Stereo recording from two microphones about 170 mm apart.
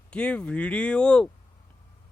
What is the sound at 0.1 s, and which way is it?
Speech, 5° left (ahead or behind).